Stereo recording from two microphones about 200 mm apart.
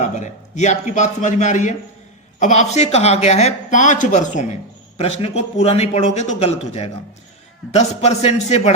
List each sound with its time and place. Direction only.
0.0 s a man's voice: 35° left (ahead or behind)